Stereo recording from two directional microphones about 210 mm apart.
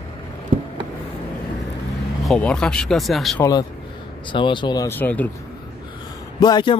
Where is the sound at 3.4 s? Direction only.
20° left (ahead or behind).